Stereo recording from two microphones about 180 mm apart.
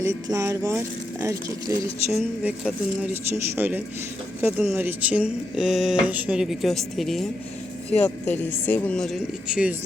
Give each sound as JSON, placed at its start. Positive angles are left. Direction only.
{"t": 0.0, "sound": "speech", "side_deg": -15}
{"t": 2.1, "sound": "speech", "side_deg": -5}